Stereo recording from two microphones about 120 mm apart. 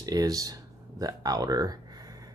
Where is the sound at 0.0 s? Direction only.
30° right (ahead or behind).